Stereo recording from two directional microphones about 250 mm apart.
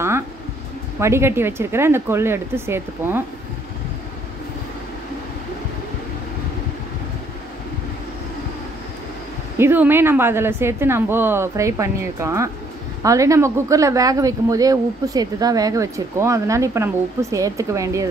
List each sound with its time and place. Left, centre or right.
0.9 s speech: centre
9.6 s speech: centre